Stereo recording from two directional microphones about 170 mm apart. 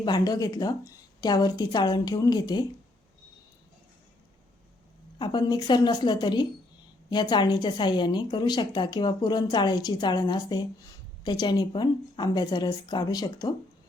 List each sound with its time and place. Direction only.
0.0 s a woman's voice: 25° left (ahead or behind)
5.2 s a woman's voice: 25° left (ahead or behind)